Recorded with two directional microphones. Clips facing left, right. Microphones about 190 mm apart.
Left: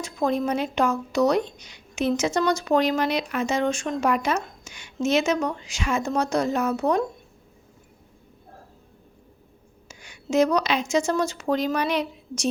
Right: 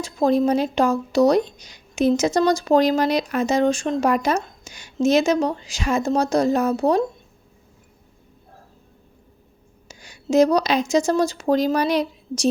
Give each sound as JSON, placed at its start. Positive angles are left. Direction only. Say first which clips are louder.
{"t": 0.0, "sound": "speech", "louder": "right 6 dB", "side_deg": -35}
{"t": 9.9, "sound": "speech", "louder": "right 5 dB", "side_deg": -35}